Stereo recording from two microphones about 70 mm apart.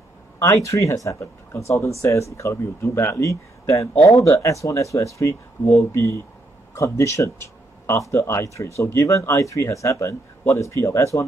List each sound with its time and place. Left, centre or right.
0.4 s a man's voice: left